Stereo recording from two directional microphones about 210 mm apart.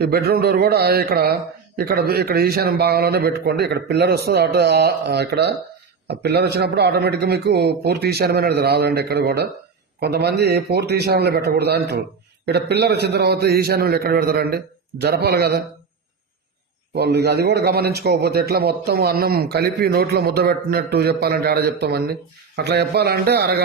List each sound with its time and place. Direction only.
0.0 s speech: 50° right (ahead or behind)
16.9 s speech: 50° right (ahead or behind)